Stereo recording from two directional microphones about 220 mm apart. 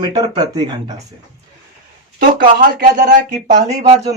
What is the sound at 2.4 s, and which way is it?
Speech, 40° right (ahead or behind).